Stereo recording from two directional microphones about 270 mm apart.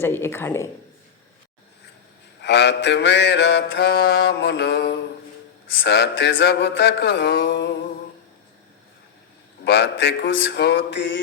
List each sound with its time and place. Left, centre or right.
0.0 s speech: centre
2.4 s mantra: left
9.6 s mantra: left